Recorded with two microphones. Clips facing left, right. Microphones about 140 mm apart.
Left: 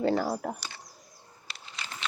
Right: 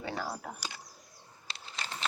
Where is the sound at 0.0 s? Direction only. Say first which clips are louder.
Left 10 dB; 65° left (ahead or behind).